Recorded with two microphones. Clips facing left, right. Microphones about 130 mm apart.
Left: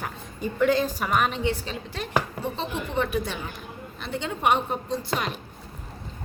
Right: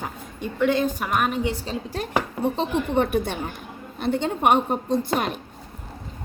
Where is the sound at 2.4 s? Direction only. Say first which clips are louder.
Right 7 dB; 55° right (ahead or behind).